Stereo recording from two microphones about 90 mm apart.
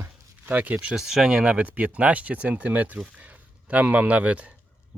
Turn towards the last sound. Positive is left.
turn(degrees=-15)  # may be behind; listen again after turning